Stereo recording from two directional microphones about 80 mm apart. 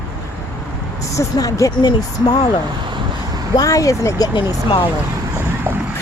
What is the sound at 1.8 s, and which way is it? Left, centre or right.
Speech, left.